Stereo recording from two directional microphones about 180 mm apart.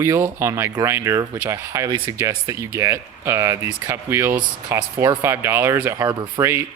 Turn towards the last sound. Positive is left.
turn(degrees=-15)  # may be behind; listen again after turning